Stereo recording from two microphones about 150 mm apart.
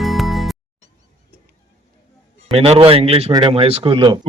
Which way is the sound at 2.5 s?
40° right (ahead or behind).